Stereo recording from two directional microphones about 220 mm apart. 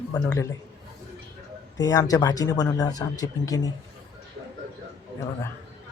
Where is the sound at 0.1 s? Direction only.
15° left (ahead or behind).